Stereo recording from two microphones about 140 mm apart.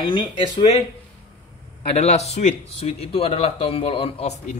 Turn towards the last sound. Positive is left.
turn(degrees=50)  # may be behind; listen again after turning